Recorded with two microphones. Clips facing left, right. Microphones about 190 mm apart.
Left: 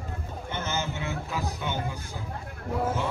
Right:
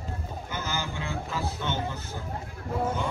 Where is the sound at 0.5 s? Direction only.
25° left (ahead or behind).